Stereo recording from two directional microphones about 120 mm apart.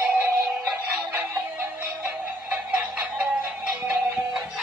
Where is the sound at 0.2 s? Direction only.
15° right (ahead or behind).